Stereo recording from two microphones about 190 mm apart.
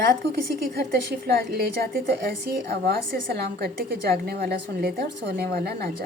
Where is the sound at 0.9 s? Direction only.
55° right (ahead or behind).